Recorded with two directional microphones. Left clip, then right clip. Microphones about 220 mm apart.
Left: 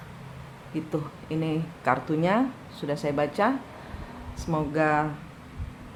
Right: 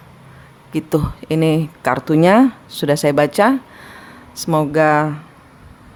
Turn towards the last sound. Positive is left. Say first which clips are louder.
# right 10 dB
turn(degrees=-50)  # may be behind; listen again after turning